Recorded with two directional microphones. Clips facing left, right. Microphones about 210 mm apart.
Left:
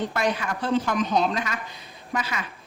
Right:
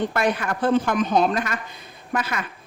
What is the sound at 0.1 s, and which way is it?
Speech, 55° right (ahead or behind).